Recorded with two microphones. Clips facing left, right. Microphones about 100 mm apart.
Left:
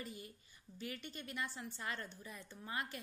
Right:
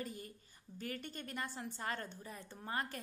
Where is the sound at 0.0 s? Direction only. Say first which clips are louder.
Right 3 dB; 45° right (ahead or behind).